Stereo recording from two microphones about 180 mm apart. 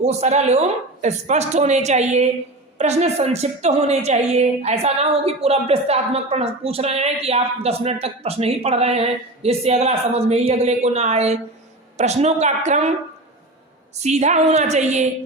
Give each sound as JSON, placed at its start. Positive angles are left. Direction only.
{"t": 0.0, "sound": "a woman's voice", "side_deg": -40}
{"t": 14.0, "sound": "a woman's voice", "side_deg": -40}